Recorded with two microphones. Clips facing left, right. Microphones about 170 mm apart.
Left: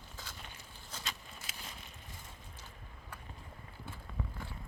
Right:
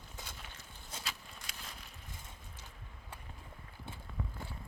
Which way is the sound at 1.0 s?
5° left (ahead or behind).